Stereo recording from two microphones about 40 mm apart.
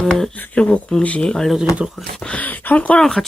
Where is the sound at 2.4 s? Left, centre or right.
Left.